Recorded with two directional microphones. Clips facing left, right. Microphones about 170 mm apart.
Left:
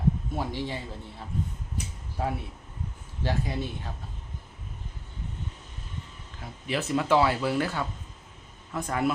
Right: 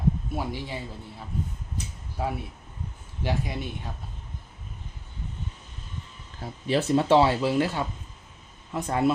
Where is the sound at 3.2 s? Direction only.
15° right (ahead or behind).